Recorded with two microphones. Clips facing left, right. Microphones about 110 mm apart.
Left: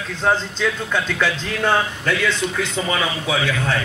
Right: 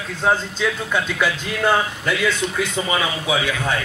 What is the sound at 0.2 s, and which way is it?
A man's voice, 10° right (ahead or behind).